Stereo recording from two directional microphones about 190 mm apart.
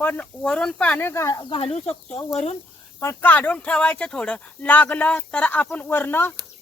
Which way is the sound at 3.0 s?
10° left (ahead or behind).